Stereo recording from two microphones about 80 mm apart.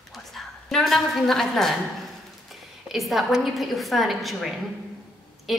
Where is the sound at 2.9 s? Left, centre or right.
Centre.